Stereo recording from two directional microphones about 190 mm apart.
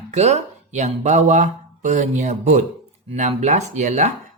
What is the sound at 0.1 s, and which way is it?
Speech, 35° right (ahead or behind).